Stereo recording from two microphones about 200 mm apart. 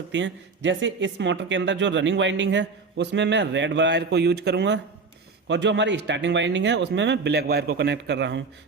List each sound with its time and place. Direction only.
0.1 s speech: 65° right (ahead or behind)